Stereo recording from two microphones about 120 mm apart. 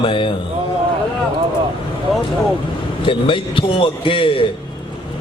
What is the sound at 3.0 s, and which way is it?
Mantra, 45° left (ahead or behind).